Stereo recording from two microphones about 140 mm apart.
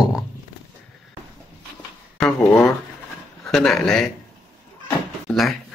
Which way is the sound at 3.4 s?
Centre (ahead or behind).